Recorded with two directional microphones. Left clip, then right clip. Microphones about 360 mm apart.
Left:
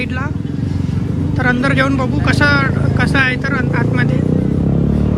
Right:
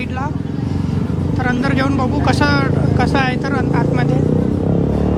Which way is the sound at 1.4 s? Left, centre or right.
Centre.